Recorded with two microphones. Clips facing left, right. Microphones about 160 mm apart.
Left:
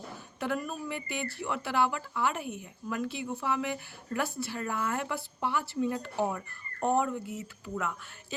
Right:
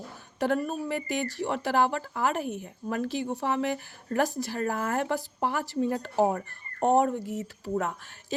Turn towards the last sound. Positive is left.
turn(degrees=-40)  # may be behind; listen again after turning